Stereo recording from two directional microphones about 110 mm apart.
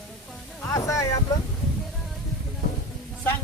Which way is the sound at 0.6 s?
25° left (ahead or behind).